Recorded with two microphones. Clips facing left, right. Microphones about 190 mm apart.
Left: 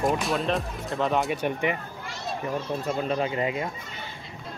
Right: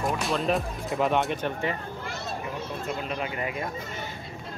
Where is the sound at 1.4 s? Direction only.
15° left (ahead or behind).